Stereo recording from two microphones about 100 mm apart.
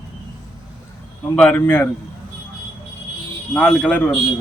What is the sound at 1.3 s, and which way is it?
Speech, 15° left (ahead or behind).